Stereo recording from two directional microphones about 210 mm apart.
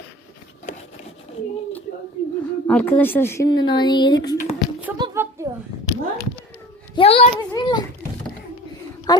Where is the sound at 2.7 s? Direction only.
5° left (ahead or behind).